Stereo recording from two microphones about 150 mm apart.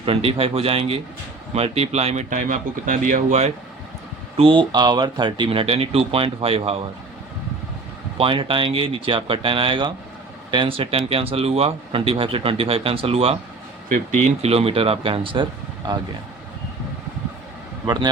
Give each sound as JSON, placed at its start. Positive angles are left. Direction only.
{"t": 0.0, "sound": "speech", "side_deg": -40}
{"t": 4.4, "sound": "speech", "side_deg": -35}
{"t": 8.2, "sound": "speech", "side_deg": -35}
{"t": 17.8, "sound": "a man's voice", "side_deg": -25}